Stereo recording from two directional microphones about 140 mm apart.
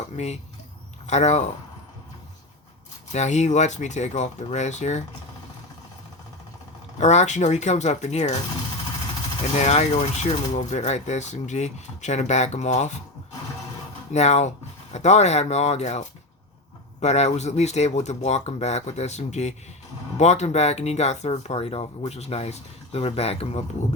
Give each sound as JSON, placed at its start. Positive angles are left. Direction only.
{"t": 0.2, "sound": "speech", "side_deg": 55}
{"t": 3.1, "sound": "speech", "side_deg": 55}
{"t": 7.0, "sound": "speech", "side_deg": 55}
{"t": 9.6, "sound": "speech", "side_deg": 55}
{"t": 14.1, "sound": "speech", "side_deg": 55}